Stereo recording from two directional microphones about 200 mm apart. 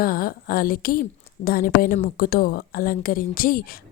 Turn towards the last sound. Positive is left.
turn(degrees=45)  # may be behind; listen again after turning